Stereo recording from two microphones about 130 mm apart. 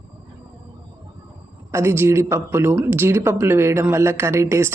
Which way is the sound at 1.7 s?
20° right (ahead or behind).